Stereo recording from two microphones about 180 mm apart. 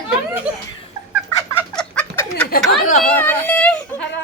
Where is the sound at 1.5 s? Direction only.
5° left (ahead or behind).